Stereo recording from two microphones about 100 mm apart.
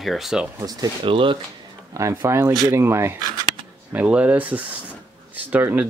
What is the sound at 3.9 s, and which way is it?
Speech, 15° right (ahead or behind).